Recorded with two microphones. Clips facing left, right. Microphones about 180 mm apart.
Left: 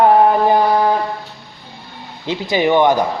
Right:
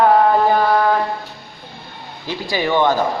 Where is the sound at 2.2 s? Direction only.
20° left (ahead or behind).